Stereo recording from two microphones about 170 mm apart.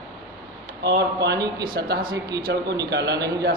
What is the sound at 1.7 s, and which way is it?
Speech, 65° right (ahead or behind).